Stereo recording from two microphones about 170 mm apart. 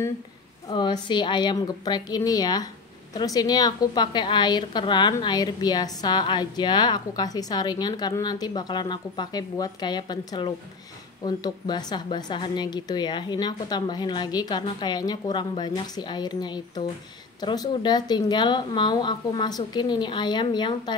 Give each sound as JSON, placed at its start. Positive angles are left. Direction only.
{"t": 0.7, "sound": "a woman's voice", "side_deg": 25}